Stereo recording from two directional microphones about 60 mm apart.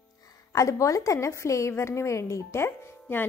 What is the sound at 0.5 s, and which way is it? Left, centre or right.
A woman's voice, left.